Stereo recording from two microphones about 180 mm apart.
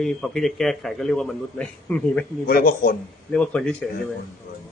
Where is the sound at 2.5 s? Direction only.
55° left (ahead or behind).